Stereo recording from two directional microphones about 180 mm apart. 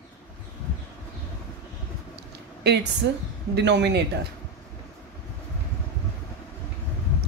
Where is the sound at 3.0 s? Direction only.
80° right.